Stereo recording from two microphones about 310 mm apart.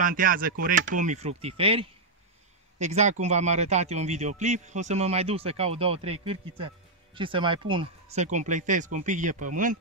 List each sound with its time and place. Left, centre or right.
0.0 s a man's voice: right